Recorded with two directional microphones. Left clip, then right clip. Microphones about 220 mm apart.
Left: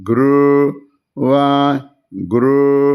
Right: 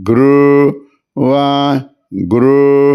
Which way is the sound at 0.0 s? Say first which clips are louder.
Right 4 dB; 35° right (ahead or behind).